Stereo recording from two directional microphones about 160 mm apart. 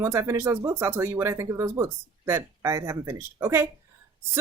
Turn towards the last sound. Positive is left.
turn(degrees=-15)  # may be behind; listen again after turning